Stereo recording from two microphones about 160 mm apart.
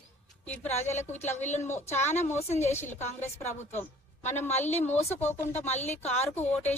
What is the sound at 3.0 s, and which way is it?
Speech, 45° left (ahead or behind).